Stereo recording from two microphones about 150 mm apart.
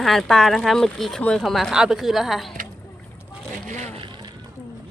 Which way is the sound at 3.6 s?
50° right (ahead or behind).